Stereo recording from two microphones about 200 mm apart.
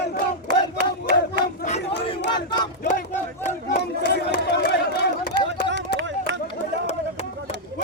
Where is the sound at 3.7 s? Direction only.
55° left (ahead or behind).